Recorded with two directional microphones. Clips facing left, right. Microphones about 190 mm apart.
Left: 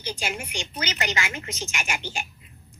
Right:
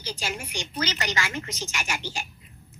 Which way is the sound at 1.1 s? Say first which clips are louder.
Even; 15° left (ahead or behind).